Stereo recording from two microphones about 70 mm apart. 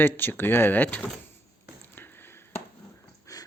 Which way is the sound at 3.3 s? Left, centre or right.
Left.